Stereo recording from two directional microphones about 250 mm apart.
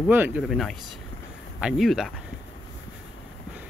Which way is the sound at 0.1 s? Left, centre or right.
Centre.